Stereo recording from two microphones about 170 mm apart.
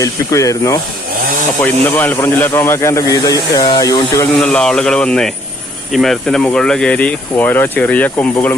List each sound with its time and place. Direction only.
0.0 s a man's voice: 20° left (ahead or behind)
4.4 s a man's voice: 5° left (ahead or behind)